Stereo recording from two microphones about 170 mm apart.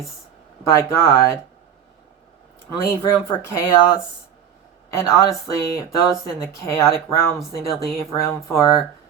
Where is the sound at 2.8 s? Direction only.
20° left (ahead or behind).